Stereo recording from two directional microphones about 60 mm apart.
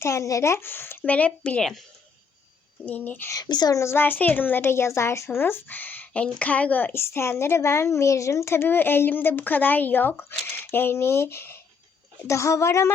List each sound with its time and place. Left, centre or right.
0.0 s speech: left
0.5 s a woman's voice: left
1.0 s a woman's voice: left
2.8 s a woman's voice: left
3.3 s a woman's voice: left
3.8 s a child's voice: left
4.0 s a woman's voice: left
6.2 s a woman's voice: centre
6.5 s a woman's voice: left
6.9 s a woman's voice: left
12.3 s a child's voice: left